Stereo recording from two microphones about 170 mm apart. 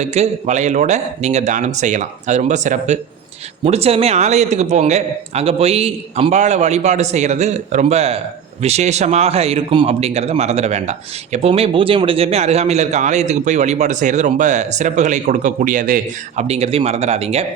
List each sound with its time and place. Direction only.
0.0 s a man's voice: 40° right (ahead or behind)